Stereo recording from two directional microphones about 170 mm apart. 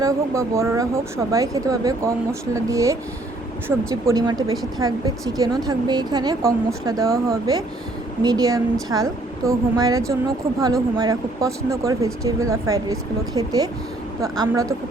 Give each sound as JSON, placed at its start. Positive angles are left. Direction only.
{"t": 0.0, "sound": "speech", "side_deg": -15}
{"t": 4.1, "sound": "a woman's voice", "side_deg": -25}